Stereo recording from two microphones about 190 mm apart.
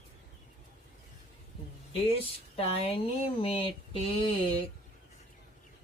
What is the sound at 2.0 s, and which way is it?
Speech, 30° left (ahead or behind).